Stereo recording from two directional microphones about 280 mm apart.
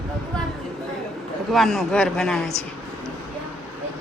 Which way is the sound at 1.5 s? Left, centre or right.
Centre.